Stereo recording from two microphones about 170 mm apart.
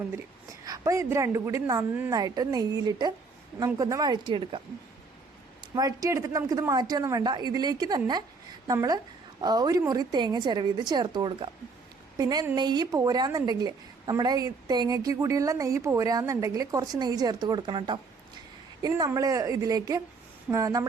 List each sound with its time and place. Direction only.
0.6 s a woman's voice: 20° right (ahead or behind)
5.7 s a woman's voice: 20° right (ahead or behind)